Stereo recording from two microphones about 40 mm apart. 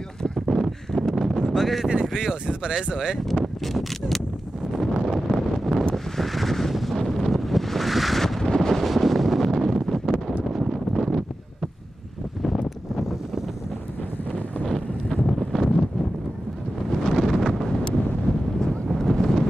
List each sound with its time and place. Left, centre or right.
0.5 s a sound: centre
1.6 s speech: centre
1.9 s speech: right
3.3 s a sound: centre
5.0 s wind noise: centre
6.1 s a sound: centre
6.7 s wind noise: centre
8.4 s wind noise: centre
14.7 s wind noise: centre
17.0 s wind noise: centre
18.9 s wind noise: centre